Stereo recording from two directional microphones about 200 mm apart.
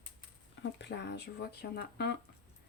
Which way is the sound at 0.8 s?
60° left (ahead or behind).